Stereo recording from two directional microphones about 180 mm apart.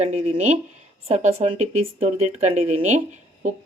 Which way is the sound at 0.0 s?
40° right (ahead or behind).